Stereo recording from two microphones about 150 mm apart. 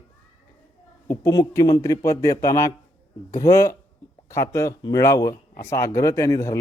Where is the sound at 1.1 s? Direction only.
20° left (ahead or behind).